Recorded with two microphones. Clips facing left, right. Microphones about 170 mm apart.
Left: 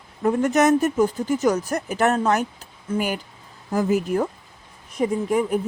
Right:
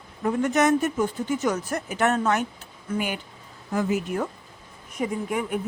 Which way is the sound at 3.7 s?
40° left (ahead or behind).